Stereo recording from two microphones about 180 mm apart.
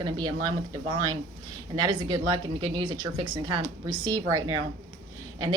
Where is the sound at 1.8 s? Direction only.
25° right (ahead or behind).